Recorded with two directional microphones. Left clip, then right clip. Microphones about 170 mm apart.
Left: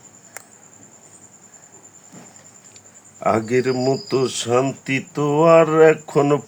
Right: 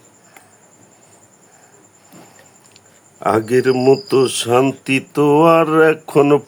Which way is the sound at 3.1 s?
40° right (ahead or behind).